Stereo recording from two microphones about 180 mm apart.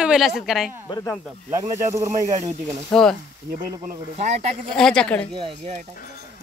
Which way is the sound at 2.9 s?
5° left (ahead or behind).